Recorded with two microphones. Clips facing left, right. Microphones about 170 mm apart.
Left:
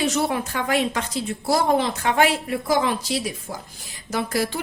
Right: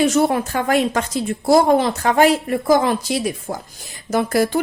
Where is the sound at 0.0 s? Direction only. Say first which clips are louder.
Right 6 dB; 50° right (ahead or behind).